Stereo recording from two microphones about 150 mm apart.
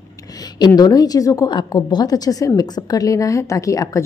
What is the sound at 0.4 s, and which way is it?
A woman's voice, 25° left (ahead or behind).